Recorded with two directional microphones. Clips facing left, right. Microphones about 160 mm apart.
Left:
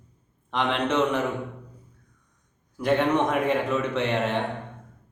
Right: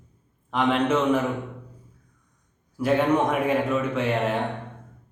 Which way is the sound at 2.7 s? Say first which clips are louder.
Right 1 dB; 5° right (ahead or behind).